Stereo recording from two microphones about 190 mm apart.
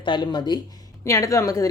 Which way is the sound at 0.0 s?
25° left (ahead or behind).